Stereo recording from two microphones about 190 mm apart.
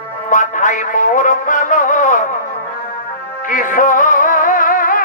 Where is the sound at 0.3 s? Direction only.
40° left (ahead or behind).